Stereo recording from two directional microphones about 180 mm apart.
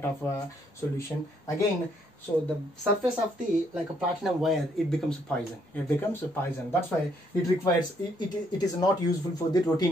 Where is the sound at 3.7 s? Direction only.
5° right (ahead or behind).